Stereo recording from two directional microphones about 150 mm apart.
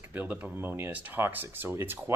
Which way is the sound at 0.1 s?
10° right (ahead or behind).